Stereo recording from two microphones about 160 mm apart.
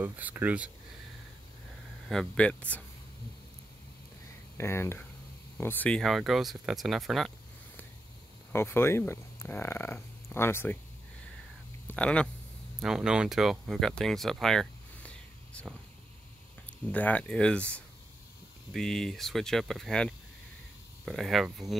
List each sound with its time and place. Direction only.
0.0 s speech: 10° right (ahead or behind)
2.0 s speech: 5° left (ahead or behind)
4.6 s speech: 15° left (ahead or behind); by 7.3 s centre (ahead or behind)
8.5 s speech: 15° left (ahead or behind)
11.9 s speech: 5° left (ahead or behind)
12.8 s speech: 5° right (ahead or behind)
16.8 s speech: 10° left (ahead or behind)